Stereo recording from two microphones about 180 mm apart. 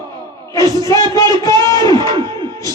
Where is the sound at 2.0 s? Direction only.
25° right (ahead or behind).